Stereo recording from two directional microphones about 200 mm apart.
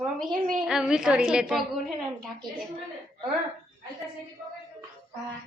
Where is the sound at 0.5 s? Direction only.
Centre (ahead or behind).